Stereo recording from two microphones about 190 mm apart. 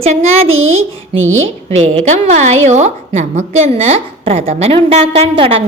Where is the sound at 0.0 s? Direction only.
35° right (ahead or behind).